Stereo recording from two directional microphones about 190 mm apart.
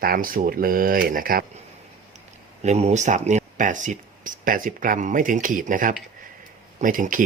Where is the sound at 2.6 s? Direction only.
35° right (ahead or behind).